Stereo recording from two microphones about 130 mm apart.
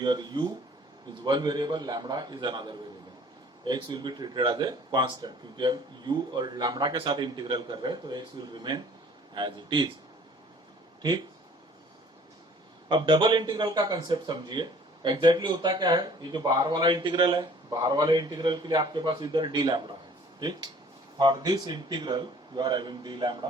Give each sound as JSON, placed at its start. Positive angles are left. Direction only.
{"t": 0.0, "sound": "a man's voice", "side_deg": -35}
{"t": 12.9, "sound": "a man's voice", "side_deg": -35}
{"t": 21.2, "sound": "a man's voice", "side_deg": -35}